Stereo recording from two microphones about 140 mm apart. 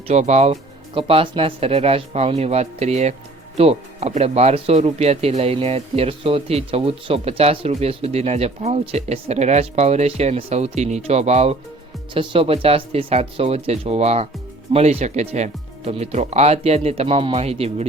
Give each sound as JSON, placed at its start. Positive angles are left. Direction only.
{"t": 0.1, "sound": "speech", "side_deg": -55}
{"t": 12.1, "sound": "speech", "side_deg": -40}